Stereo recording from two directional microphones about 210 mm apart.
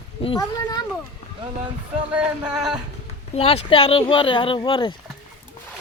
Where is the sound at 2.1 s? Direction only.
5° right (ahead or behind).